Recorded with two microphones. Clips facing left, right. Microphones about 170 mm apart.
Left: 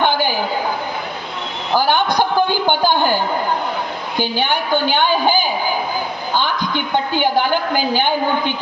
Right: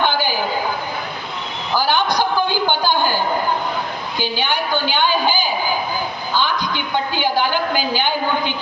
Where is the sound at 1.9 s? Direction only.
55° left (ahead or behind).